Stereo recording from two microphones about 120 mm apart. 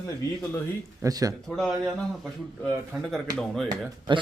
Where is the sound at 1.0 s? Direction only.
30° right (ahead or behind).